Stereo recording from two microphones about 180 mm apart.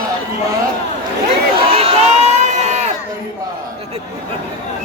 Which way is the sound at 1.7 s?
35° right (ahead or behind).